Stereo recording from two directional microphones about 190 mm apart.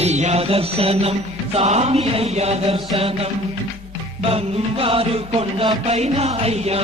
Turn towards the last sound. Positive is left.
turn(degrees=-35)  # may be behind; listen again after turning